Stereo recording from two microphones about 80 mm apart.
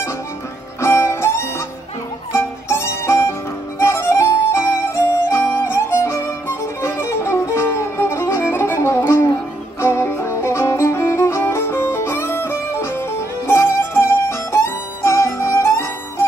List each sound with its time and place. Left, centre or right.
0.7 s music: left